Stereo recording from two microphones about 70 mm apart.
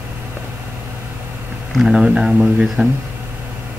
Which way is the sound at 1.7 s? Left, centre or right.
Centre.